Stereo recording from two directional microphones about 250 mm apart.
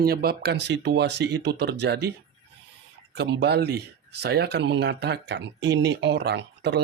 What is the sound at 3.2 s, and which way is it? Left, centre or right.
Speech, right.